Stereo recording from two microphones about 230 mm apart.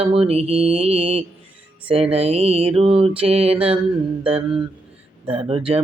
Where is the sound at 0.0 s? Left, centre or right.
Right.